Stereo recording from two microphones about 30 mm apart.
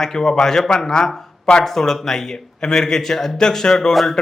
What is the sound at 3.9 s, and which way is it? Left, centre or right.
Speech, centre.